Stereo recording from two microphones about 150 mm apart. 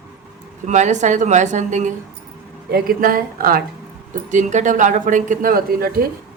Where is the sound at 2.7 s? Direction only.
80° right.